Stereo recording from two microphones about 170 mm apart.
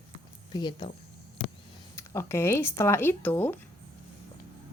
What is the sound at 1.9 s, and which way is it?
Speech, 15° left (ahead or behind).